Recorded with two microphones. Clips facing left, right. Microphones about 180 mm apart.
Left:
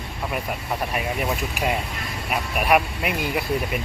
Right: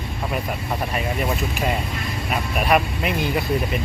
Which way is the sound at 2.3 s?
10° left (ahead or behind).